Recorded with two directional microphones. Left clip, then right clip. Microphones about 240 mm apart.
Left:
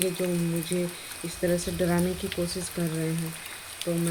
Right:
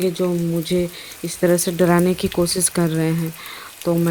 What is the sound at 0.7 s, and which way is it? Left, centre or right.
Speech, right.